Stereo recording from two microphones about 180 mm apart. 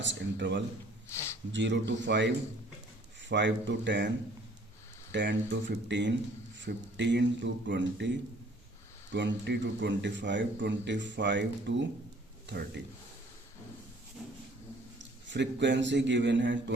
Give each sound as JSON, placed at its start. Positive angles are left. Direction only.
{"t": 0.0, "sound": "a man's voice", "side_deg": -85}
{"t": 1.1, "sound": "speech", "side_deg": 15}
{"t": 1.5, "sound": "a man's voice", "side_deg": -85}
{"t": 5.1, "sound": "a man's voice", "side_deg": -85}
{"t": 9.1, "sound": "a man's voice", "side_deg": -75}
{"t": 15.3, "sound": "a man's voice", "side_deg": -80}